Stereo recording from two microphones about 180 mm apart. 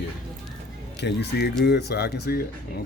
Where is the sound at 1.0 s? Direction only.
70° left (ahead or behind).